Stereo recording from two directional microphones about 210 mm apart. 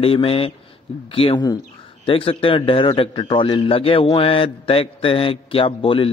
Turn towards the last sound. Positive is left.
turn(degrees=25)  # may be behind; listen again after turning